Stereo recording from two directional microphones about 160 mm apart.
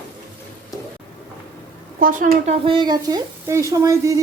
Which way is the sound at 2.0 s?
55° right (ahead or behind).